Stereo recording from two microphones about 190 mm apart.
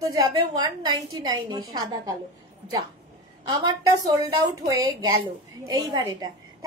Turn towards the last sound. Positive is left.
turn(degrees=-20)  # may be behind; listen again after turning